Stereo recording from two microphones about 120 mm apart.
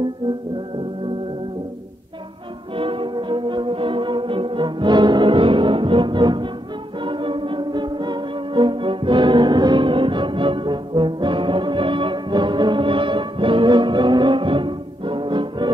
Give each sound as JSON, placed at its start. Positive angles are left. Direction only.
{"t": 2.8, "sound": "music", "side_deg": -45}